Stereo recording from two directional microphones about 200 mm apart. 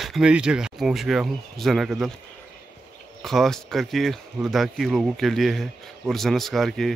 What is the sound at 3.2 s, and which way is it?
Speech, centre (ahead or behind).